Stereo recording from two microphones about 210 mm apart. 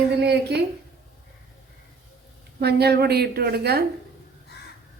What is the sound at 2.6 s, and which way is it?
Speech, 50° right (ahead or behind).